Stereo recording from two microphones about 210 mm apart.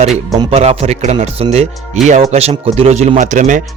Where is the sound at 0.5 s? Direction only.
30° right (ahead or behind).